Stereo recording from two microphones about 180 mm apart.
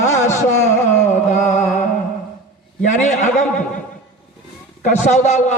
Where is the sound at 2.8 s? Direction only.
40° left (ahead or behind).